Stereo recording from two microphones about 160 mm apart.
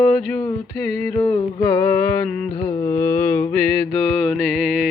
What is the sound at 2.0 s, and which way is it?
Mantra, 15° left (ahead or behind).